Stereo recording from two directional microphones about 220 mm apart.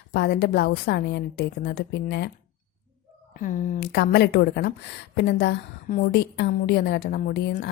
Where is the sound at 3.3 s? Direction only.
35° left (ahead or behind).